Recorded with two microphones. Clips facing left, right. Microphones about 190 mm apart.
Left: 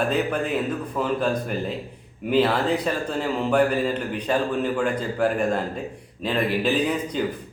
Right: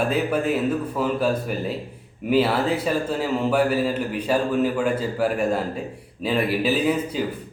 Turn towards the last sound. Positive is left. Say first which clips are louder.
# right 1 dB
turn(degrees=-5)  # may be behind; listen again after turning